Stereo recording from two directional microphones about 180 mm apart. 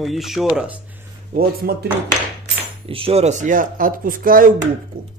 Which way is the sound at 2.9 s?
30° right (ahead or behind).